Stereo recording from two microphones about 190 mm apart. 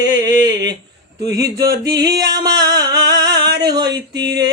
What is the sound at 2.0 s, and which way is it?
Music, 20° right (ahead or behind).